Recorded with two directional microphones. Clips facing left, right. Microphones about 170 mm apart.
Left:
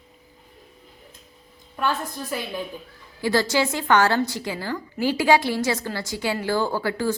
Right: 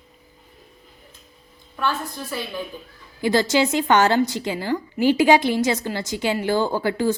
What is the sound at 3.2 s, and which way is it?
A woman's voice, 20° right (ahead or behind).